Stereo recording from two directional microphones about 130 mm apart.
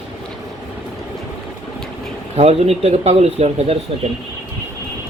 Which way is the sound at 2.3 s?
55° right (ahead or behind).